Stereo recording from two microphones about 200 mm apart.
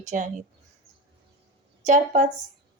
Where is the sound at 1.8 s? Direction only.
40° right (ahead or behind).